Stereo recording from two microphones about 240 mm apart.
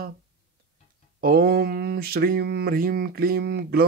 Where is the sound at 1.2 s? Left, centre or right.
Right.